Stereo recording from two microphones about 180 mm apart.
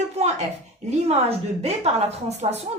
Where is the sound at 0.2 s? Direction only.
35° right (ahead or behind).